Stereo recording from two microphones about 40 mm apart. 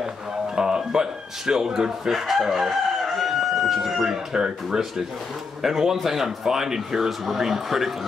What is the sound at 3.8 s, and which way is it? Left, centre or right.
Speech, centre.